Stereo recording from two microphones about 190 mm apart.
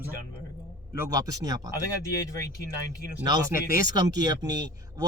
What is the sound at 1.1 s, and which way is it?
Speech, 20° right (ahead or behind).